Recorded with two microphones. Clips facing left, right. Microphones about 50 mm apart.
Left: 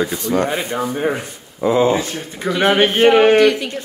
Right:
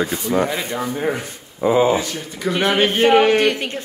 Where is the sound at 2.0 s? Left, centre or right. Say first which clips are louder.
Left 1 dB; left.